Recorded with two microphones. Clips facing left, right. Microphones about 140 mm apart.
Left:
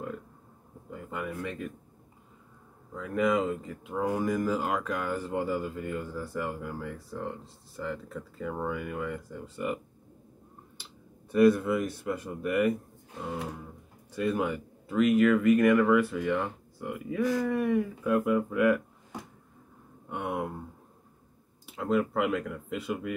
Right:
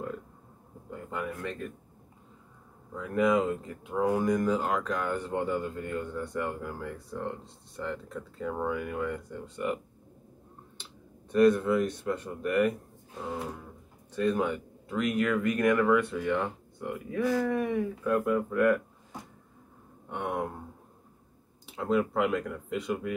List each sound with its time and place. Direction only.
0.8 s a sound: centre (ahead or behind)
3.0 s speech: centre (ahead or behind)
10.8 s speech: 10° left (ahead or behind)
14.1 s speech: 10° left (ahead or behind)
20.1 s speech: 5° left (ahead or behind)
21.6 s speech: centre (ahead or behind)